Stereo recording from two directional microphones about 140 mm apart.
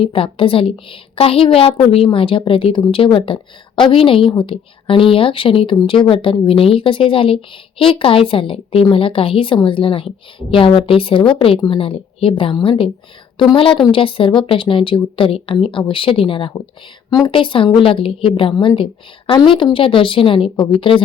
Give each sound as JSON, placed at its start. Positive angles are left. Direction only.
{"t": 0.0, "sound": "a woman's voice", "side_deg": 40}